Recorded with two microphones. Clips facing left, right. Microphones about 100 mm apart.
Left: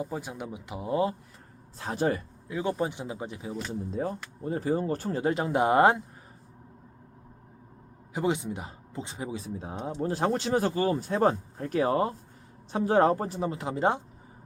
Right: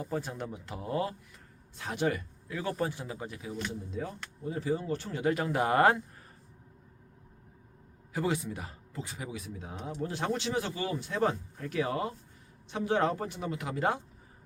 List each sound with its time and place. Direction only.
0.0 s speech: 10° left (ahead or behind)
1.8 s speech: 35° left (ahead or behind)
2.5 s speech: 20° left (ahead or behind)
3.5 s speech: 35° left (ahead or behind); by 6.0 s 20° left (ahead or behind)
8.1 s speech: 20° left (ahead or behind)